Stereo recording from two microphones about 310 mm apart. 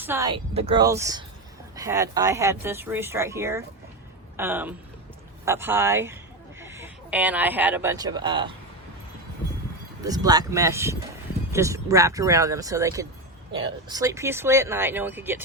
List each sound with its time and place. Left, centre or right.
0.0 s speech: centre
10.0 s speech: centre